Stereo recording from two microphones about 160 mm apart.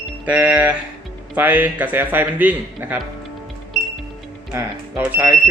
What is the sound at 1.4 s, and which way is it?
A man's voice, 10° right (ahead or behind).